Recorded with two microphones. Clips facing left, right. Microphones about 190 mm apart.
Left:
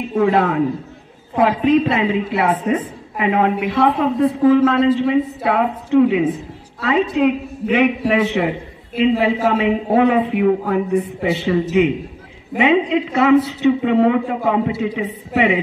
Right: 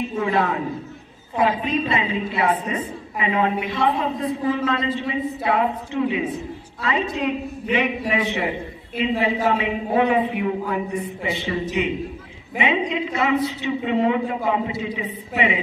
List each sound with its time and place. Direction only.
0.2 s a woman's voice: 60° left (ahead or behind)